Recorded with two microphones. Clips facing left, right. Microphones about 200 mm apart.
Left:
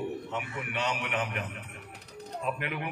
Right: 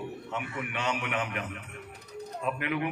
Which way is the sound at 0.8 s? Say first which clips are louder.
Even; 40° left (ahead or behind).